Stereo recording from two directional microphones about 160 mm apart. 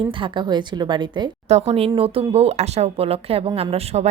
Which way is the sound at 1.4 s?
40° right (ahead or behind).